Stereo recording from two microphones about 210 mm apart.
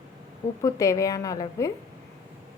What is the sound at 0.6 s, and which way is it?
A woman's voice, 15° left (ahead or behind).